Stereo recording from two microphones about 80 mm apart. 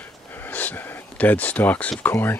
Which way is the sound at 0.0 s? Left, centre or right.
Left.